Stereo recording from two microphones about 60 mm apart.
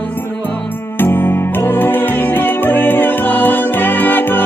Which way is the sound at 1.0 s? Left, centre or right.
Left.